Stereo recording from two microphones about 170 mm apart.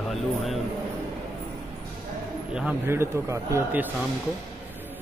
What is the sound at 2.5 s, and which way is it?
A man's voice, 10° right (ahead or behind).